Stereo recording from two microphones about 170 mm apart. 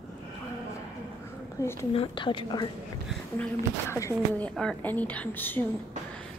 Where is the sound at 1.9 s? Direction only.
30° left (ahead or behind).